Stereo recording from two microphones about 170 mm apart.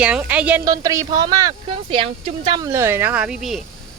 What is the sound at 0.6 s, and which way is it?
Speech, 20° right (ahead or behind).